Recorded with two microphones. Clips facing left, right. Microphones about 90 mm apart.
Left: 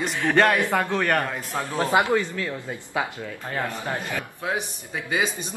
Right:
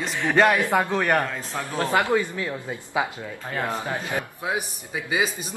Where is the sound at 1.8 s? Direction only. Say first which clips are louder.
Left 1 dB; 20° left (ahead or behind).